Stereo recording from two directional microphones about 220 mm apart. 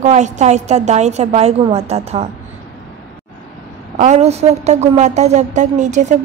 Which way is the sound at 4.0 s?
30° right (ahead or behind).